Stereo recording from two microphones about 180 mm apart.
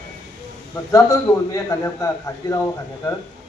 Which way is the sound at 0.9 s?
15° left (ahead or behind).